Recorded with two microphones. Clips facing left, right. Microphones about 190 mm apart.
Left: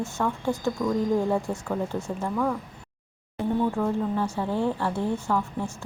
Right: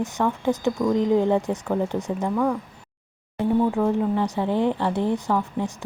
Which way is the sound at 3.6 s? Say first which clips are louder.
Right 4 dB; 15° right (ahead or behind).